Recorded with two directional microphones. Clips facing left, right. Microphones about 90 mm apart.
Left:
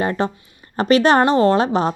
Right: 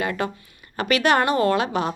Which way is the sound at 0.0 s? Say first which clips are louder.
Left 5 dB; 35° left (ahead or behind).